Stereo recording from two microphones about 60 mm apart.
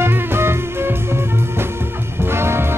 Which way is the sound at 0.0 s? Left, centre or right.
Right.